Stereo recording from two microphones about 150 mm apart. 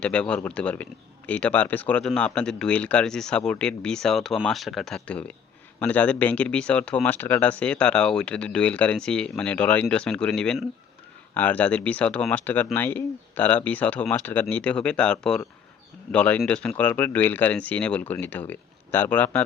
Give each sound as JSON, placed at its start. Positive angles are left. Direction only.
{"t": 0.0, "sound": "speech", "side_deg": 5}